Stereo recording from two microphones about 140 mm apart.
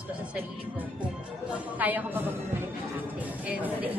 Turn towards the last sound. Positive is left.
turn(degrees=-10)  # may be behind; listen again after turning